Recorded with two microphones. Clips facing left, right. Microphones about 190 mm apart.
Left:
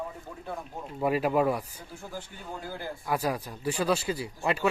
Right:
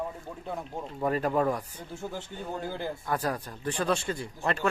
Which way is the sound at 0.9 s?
10° left (ahead or behind).